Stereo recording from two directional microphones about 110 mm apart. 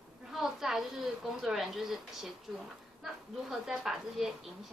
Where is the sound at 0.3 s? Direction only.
5° right (ahead or behind).